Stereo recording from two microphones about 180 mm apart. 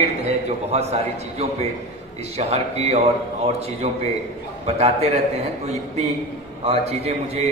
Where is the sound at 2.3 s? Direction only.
35° right (ahead or behind).